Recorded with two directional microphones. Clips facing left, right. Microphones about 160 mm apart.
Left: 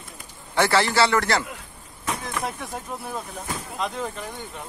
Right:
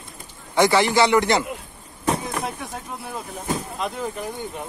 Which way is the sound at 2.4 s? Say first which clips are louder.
Even; centre (ahead or behind).